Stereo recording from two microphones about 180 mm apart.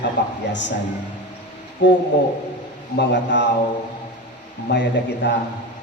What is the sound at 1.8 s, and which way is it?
A man's voice, 75° left (ahead or behind).